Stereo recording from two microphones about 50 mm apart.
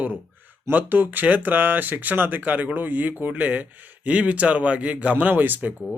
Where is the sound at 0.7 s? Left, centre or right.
Right.